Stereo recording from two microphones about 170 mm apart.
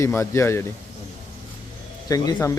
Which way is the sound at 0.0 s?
15° left (ahead or behind).